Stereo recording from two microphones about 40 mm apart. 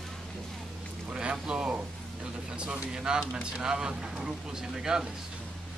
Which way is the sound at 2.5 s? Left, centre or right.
Right.